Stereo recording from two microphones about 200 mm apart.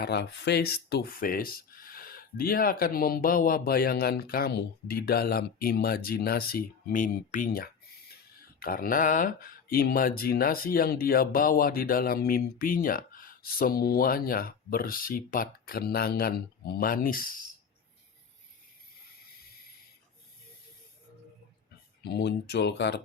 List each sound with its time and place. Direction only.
0.0 s speech: 55° left (ahead or behind)
22.0 s speech: 55° left (ahead or behind)